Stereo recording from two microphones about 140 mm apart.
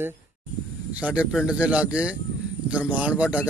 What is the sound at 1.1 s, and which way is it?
Speech, 5° right (ahead or behind).